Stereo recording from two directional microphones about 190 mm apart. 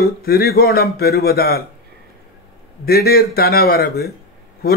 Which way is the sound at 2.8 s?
55° left (ahead or behind).